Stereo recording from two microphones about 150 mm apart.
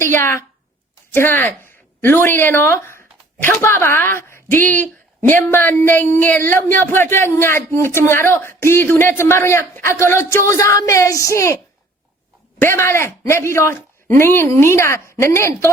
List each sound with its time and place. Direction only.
0.0 s a woman's voice: 15° left (ahead or behind)
12.5 s speech: 15° left (ahead or behind)